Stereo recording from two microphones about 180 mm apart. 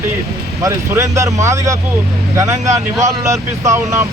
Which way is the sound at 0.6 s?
15° right (ahead or behind).